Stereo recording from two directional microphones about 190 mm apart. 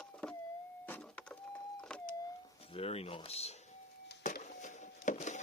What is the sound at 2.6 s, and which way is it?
Speech, 30° left (ahead or behind).